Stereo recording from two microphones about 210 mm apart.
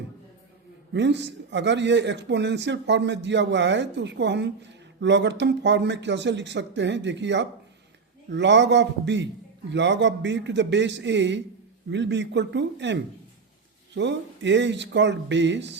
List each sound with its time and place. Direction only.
0.9 s a man's voice: 55° right (ahead or behind)